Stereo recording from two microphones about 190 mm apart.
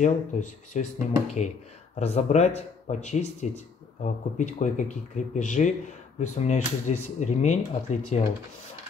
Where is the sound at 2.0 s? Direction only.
35° left (ahead or behind).